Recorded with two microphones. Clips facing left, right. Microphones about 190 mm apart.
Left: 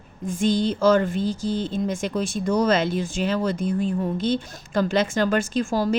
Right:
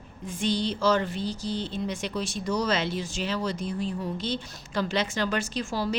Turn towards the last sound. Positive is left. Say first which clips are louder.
# left 7 dB
turn(degrees=50)  # may be behind; listen again after turning